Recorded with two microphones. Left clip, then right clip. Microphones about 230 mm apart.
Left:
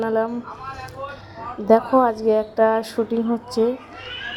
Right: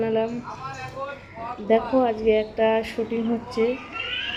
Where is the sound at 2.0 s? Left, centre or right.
Centre.